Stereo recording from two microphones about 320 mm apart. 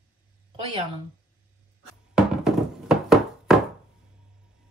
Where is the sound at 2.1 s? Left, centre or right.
Centre.